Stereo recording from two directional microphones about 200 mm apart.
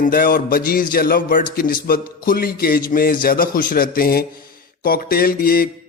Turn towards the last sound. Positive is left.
turn(degrees=45)  # may be behind; listen again after turning